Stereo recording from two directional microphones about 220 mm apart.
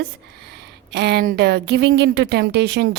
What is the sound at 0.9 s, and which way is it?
A woman's voice, 50° right (ahead or behind).